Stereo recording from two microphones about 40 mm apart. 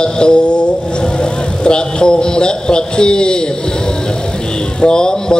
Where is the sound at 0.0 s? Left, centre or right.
Left.